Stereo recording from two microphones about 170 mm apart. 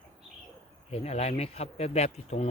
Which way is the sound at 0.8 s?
35° left (ahead or behind).